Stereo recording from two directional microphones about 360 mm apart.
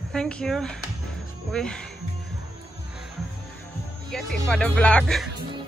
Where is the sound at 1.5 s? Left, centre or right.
Centre.